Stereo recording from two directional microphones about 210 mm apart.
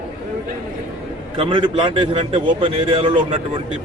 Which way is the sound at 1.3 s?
25° right (ahead or behind).